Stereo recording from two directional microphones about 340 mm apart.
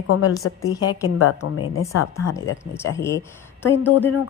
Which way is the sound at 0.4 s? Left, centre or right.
Left.